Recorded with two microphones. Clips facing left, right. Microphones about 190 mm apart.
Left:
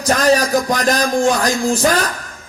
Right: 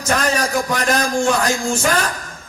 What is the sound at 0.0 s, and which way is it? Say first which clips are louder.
A man's voice: left 5 dB; 35° left (ahead or behind).